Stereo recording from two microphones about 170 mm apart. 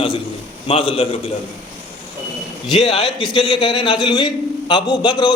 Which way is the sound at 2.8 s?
35° left (ahead or behind).